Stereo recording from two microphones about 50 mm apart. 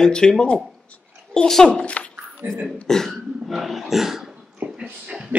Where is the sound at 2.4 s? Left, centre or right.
Right.